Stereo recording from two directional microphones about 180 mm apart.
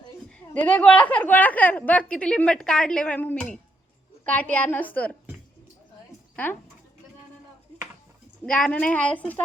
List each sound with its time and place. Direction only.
0.3 s a woman's voice: 5° left (ahead or behind)
6.3 s speech: 10° left (ahead or behind)
8.4 s a woman's voice: 5° left (ahead or behind)